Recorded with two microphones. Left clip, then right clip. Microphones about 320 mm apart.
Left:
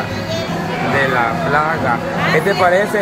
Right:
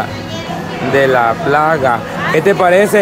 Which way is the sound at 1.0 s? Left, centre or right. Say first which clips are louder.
Right 6 dB; right.